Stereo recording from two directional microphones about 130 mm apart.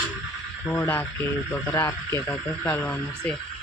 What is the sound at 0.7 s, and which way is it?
Speech, 15° left (ahead or behind).